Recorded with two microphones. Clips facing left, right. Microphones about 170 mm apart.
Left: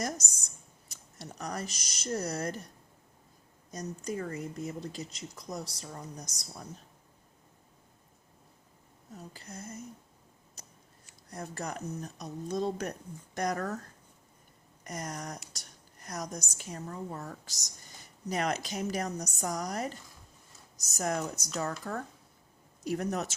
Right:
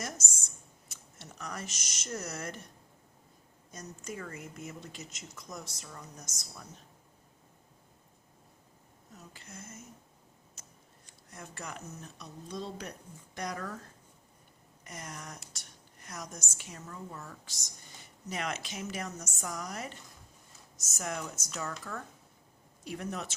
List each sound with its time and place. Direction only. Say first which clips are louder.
0.0 s speech: left 6 dB; 35° left (ahead or behind)
3.7 s speech: left 6 dB; 35° left (ahead or behind)
9.1 s speech: left 5 dB; 35° left (ahead or behind)
10.6 s a sound: left 4 dB; 35° left (ahead or behind)
11.3 s speech: left 6 dB; 35° left (ahead or behind)
14.8 s speech: left 6 dB; 40° left (ahead or behind)